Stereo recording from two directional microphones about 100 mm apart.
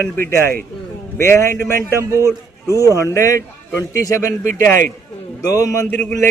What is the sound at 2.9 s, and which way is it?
A man's voice, 30° left (ahead or behind).